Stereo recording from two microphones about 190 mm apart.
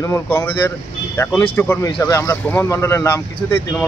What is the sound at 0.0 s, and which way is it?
Speech, 15° left (ahead or behind).